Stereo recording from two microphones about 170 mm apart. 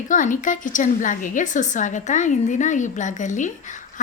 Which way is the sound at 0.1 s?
50° left (ahead or behind).